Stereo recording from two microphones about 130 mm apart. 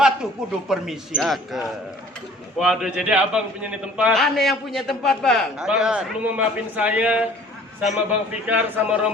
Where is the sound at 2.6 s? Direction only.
5° right (ahead or behind).